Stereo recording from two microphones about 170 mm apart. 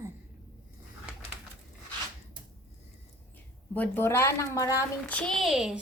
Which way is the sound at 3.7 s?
10° left (ahead or behind).